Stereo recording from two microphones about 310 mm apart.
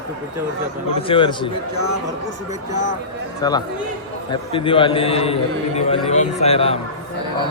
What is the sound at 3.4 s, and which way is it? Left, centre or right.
A man's voice, centre.